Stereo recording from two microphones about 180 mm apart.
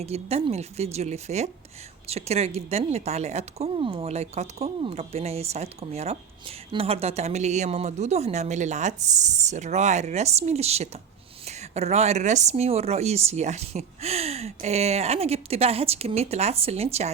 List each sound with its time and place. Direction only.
0.0 s speech: 35° right (ahead or behind)